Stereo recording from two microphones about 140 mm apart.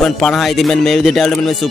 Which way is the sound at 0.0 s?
5° left (ahead or behind).